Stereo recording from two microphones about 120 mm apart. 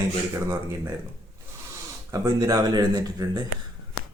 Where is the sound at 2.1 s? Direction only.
30° right (ahead or behind).